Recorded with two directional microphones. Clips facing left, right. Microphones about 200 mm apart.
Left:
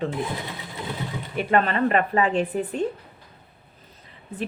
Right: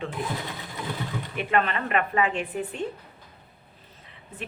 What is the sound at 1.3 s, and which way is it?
A woman's voice, 40° left (ahead or behind).